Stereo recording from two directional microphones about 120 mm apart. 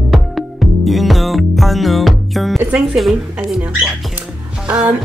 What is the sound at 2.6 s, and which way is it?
A woman's voice, 10° right (ahead or behind).